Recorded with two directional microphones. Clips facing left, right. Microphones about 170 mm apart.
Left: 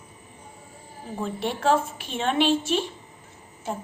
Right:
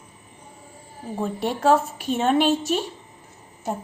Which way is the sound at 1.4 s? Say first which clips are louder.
Right 3 dB; 40° right (ahead or behind).